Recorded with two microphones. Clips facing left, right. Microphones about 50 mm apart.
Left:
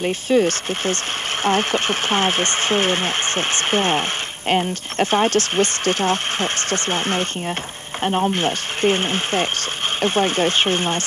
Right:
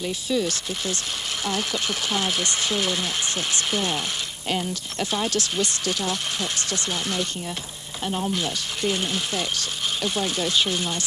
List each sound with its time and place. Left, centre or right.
0.0 s speech: left